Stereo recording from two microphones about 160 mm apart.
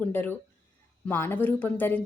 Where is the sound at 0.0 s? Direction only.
10° left (ahead or behind).